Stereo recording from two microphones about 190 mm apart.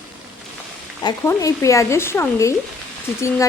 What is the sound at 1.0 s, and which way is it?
Speech, 20° left (ahead or behind).